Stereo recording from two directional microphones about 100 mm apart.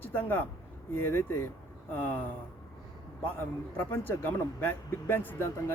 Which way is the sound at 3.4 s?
20° left (ahead or behind).